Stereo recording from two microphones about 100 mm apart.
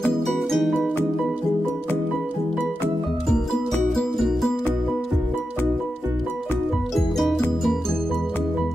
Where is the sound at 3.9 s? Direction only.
Centre (ahead or behind).